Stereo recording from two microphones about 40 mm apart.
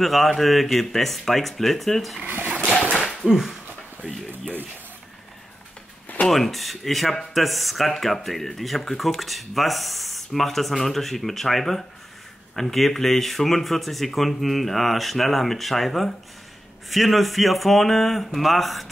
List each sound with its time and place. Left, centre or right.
0.0 s speech: centre
2.2 s speech: right
2.7 s dog: left
3.3 s a sound: centre
4.3 s speech: right
6.2 s speech: centre